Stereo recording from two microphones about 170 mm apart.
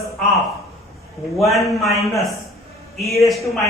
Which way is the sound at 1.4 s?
Centre (ahead or behind).